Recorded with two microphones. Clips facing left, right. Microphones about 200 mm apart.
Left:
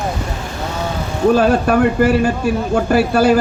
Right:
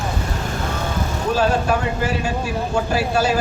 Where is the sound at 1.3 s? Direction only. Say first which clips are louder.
Left 3 dB; 60° left (ahead or behind).